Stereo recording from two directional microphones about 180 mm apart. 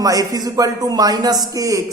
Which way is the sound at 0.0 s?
20° right (ahead or behind).